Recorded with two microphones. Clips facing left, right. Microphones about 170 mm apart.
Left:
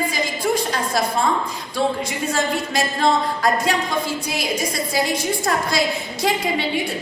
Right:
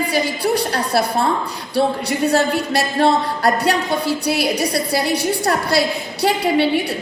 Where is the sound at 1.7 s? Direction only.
70° right (ahead or behind).